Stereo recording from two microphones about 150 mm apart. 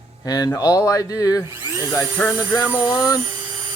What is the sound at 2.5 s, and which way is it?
Speech, 25° left (ahead or behind).